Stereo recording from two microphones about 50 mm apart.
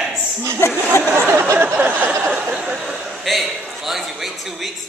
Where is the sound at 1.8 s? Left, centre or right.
Right.